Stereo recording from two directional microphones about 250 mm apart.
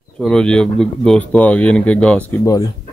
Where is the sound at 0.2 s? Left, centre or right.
Centre.